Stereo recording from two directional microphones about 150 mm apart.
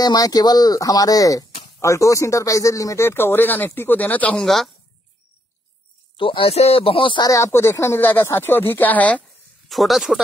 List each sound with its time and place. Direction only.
0.0 s speech: 25° left (ahead or behind); by 4.6 s centre (ahead or behind)
6.1 s speech: 35° left (ahead or behind); by 9.2 s 10° left (ahead or behind)
9.7 s speech: centre (ahead or behind)